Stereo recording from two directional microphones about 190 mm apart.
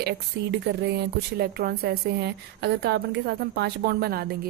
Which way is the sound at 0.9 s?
55° right (ahead or behind).